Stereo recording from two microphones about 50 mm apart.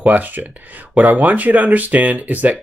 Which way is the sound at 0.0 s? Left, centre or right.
Right.